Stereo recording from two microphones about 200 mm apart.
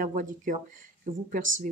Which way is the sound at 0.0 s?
40° right (ahead or behind).